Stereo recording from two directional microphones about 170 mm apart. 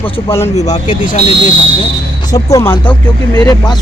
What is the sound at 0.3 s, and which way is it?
Speech, 15° left (ahead or behind).